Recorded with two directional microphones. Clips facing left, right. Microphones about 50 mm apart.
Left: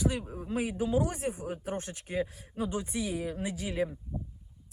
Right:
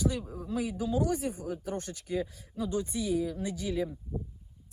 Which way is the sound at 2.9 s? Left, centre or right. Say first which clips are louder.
Right 3 dB; left.